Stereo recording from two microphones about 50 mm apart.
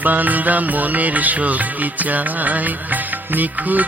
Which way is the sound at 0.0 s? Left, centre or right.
Right.